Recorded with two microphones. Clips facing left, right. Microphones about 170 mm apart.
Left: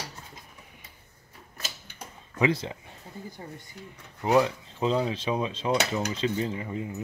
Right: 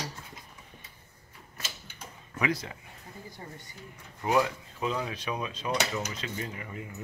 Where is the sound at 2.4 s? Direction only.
25° left (ahead or behind).